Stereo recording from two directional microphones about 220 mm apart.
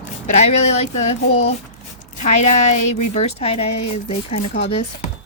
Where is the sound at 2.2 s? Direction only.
30° left (ahead or behind).